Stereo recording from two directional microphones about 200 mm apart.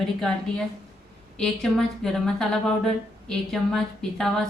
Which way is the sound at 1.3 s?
5° left (ahead or behind).